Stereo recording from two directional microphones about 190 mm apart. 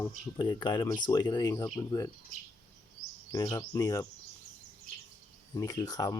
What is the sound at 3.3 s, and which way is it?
Speech, 20° left (ahead or behind).